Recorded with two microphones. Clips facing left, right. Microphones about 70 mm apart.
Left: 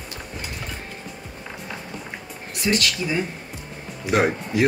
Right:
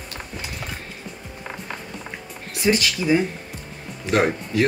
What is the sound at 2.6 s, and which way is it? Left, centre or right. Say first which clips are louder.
Speech: right 3 dB; centre.